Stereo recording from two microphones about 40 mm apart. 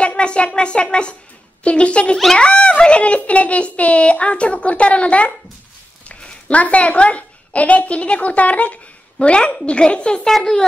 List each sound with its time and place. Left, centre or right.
0.0 s a child's voice: left
6.0 s a sound: left
6.6 s a child's voice: left
9.2 s a child's voice: left
10.3 s speech: centre